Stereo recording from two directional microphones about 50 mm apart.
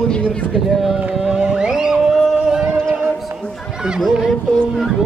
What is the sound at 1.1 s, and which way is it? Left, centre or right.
Music, centre.